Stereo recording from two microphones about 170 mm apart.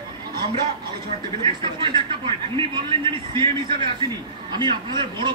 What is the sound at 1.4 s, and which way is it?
A man's voice, 30° right (ahead or behind).